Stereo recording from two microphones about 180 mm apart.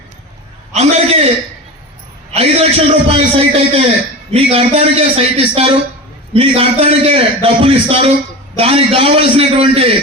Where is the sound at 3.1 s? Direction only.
30° right (ahead or behind).